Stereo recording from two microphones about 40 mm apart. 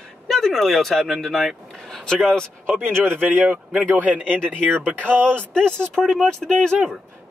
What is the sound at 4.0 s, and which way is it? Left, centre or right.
Speech, right.